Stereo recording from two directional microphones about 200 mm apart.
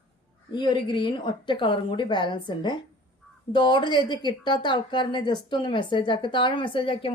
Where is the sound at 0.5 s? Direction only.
20° left (ahead or behind).